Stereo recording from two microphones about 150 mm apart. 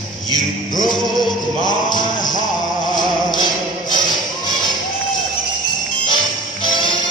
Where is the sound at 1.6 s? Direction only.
30° left (ahead or behind).